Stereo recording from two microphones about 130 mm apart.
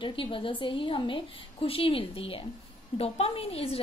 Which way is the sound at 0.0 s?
40° left (ahead or behind).